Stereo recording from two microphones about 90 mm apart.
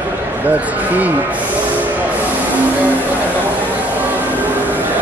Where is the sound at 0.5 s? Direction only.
20° right (ahead or behind).